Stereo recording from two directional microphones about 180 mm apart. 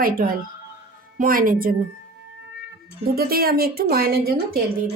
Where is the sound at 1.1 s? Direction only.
50° right (ahead or behind).